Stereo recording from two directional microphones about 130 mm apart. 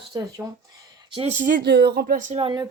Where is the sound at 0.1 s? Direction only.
30° right (ahead or behind).